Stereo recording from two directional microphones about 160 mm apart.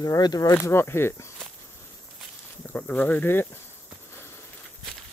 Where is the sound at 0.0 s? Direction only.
25° left (ahead or behind).